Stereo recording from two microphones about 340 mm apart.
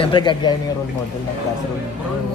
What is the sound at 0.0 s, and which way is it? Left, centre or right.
Speech, centre.